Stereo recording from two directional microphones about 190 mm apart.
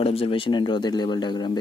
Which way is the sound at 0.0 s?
30° left (ahead or behind).